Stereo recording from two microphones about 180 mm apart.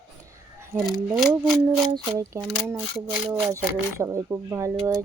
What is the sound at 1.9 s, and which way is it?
A woman's voice, 20° right (ahead or behind).